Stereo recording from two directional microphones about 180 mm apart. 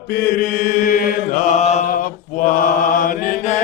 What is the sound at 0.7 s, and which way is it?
Mantra, 50° left (ahead or behind).